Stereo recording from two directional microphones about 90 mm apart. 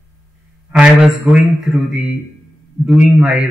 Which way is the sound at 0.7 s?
10° right (ahead or behind).